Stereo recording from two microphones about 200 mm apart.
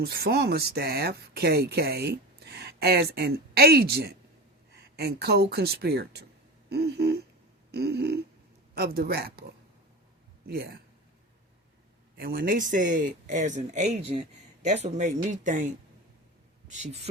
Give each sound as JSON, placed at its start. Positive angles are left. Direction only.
{"t": 0.0, "sound": "speech", "side_deg": -50}
{"t": 6.7, "sound": "a sound", "side_deg": -55}
{"t": 8.7, "sound": "speech", "side_deg": -50}
{"t": 10.4, "sound": "speech", "side_deg": -50}
{"t": 12.1, "sound": "speech", "side_deg": -50}
{"t": 16.7, "sound": "speech", "side_deg": -35}